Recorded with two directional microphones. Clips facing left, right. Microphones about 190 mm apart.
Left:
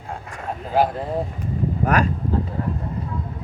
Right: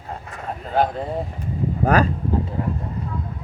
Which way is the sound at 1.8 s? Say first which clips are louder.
Right 3 dB; 30° right (ahead or behind).